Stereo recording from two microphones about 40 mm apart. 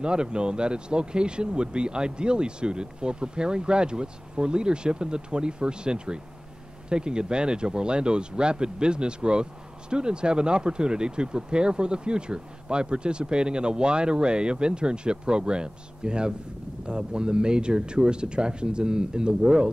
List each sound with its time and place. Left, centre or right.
0.0 s speech: right